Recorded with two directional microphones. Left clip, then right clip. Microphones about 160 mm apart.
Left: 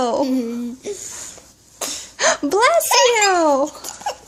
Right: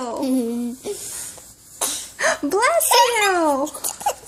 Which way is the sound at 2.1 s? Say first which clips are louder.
Left 3 dB; 15° left (ahead or behind).